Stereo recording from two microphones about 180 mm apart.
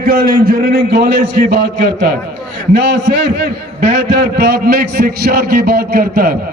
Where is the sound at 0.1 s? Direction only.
55° right (ahead or behind).